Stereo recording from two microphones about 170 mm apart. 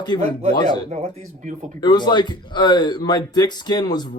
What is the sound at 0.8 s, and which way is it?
Speech, 40° right (ahead or behind).